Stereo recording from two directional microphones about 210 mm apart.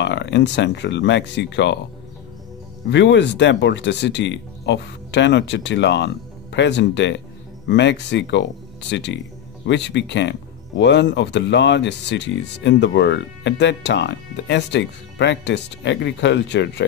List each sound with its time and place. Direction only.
0.0 s speech: 55° left (ahead or behind)
2.9 s speech: 55° left (ahead or behind)